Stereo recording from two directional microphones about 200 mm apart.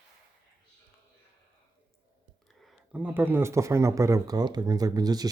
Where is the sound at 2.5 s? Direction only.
Centre (ahead or behind).